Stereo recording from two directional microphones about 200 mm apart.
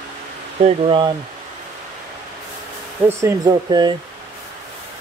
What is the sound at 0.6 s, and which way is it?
Speech, 25° right (ahead or behind).